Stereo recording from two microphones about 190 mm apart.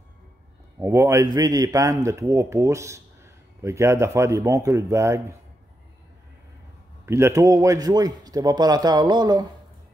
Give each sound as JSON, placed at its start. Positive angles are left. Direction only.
{"t": 0.7, "sound": "a man's voice", "side_deg": -15}
{"t": 7.1, "sound": "speech", "side_deg": -15}